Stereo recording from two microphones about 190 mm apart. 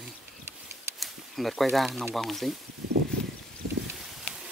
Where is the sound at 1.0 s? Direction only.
Centre (ahead or behind).